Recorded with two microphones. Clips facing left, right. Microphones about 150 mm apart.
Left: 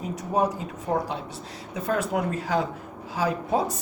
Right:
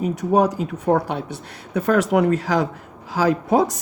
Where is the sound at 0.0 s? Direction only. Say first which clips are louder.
Right 7 dB; 75° right (ahead or behind).